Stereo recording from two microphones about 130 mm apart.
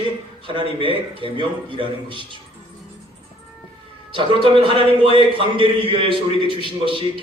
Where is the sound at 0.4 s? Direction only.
40° right (ahead or behind).